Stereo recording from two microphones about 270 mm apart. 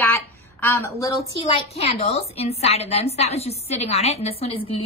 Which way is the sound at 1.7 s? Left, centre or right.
Left.